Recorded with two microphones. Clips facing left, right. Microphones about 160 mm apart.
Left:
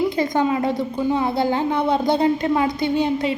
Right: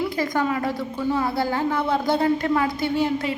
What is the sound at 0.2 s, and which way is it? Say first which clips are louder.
A woman's voice: left 4 dB; 20° left (ahead or behind).